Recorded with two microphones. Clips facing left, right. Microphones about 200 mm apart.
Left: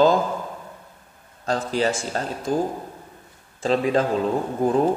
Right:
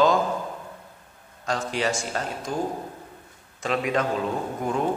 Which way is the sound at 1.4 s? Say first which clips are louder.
Left 4 dB; 35° left (ahead or behind).